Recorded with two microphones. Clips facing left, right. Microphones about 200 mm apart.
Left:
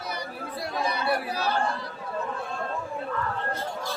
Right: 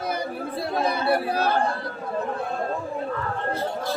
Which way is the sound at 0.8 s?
55° right (ahead or behind).